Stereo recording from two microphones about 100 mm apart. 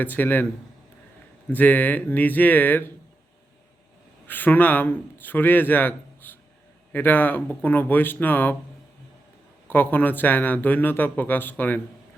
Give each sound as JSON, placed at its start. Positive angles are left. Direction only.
{"t": 0.0, "sound": "a man's voice", "side_deg": 20}
{"t": 1.5, "sound": "speech", "side_deg": 15}
{"t": 4.3, "sound": "a man's voice", "side_deg": 20}
{"t": 9.6, "sound": "a man's voice", "side_deg": 20}